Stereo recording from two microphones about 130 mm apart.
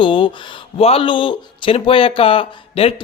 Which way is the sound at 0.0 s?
40° left (ahead or behind).